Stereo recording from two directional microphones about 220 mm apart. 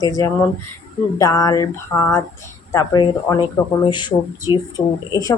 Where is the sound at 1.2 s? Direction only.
15° left (ahead or behind).